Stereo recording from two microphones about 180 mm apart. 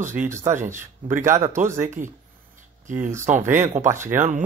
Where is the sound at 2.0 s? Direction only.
45° right (ahead or behind).